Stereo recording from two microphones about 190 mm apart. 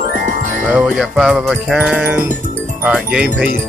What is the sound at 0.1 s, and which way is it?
Music, 45° right (ahead or behind).